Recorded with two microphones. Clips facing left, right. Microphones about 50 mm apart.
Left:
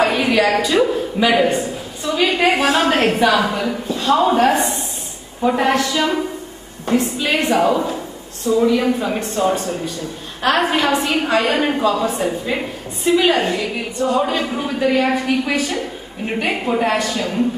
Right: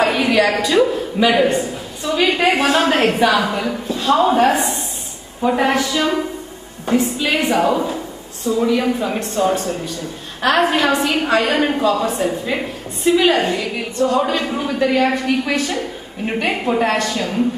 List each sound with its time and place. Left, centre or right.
0.0 s a woman's voice: centre